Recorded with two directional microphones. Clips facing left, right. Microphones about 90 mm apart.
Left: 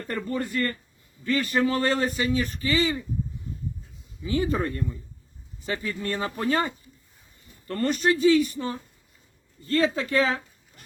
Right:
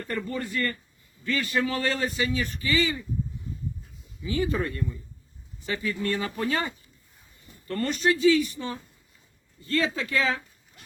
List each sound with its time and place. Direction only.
0.1 s a man's voice: 35° left (ahead or behind)
4.3 s a man's voice: 35° left (ahead or behind)